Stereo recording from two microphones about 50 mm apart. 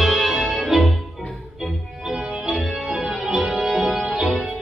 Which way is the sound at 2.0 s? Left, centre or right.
Centre.